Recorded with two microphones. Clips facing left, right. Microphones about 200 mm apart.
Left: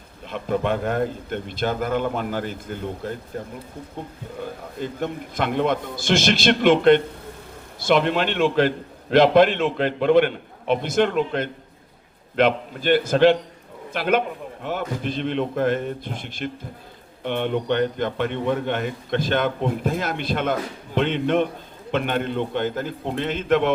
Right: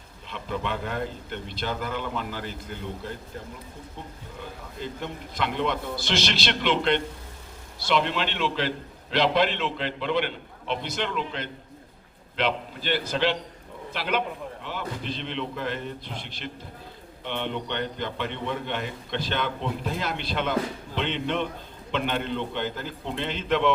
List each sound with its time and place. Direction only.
0.3 s a man's voice: 50° left (ahead or behind)
4.8 s a man's voice: 50° left (ahead or behind)